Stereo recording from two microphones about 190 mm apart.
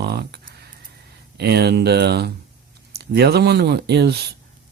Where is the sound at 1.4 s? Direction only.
60° right (ahead or behind).